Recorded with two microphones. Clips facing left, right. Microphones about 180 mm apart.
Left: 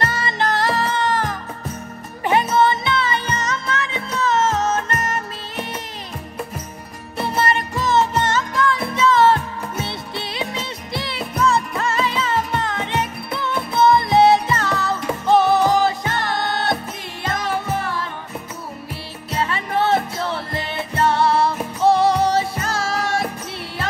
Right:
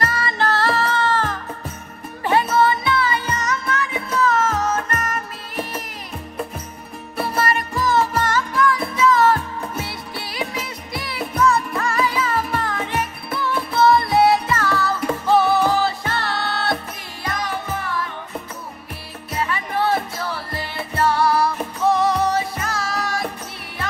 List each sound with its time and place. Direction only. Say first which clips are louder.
0.0 s music: even; 25° left (ahead or behind)
7.2 s music: left 2 dB; 25° left (ahead or behind)
19.3 s music: left 2 dB; 30° left (ahead or behind)